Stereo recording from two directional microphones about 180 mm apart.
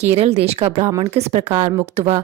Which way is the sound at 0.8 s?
20° right (ahead or behind).